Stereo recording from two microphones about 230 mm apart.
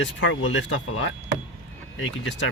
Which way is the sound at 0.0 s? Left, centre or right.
Left.